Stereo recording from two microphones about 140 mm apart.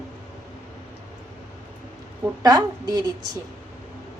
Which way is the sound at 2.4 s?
30° right (ahead or behind).